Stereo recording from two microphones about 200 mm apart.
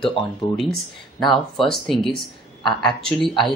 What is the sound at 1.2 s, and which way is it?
Speech, centre (ahead or behind).